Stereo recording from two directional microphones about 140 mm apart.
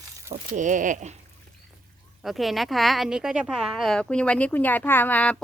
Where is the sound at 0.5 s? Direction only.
65° right (ahead or behind).